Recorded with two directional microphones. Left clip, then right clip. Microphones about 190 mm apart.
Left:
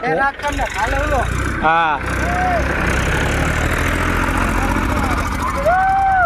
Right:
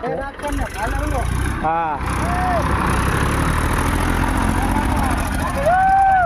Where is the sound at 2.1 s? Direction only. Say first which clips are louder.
Left 2 dB; 40° right (ahead or behind).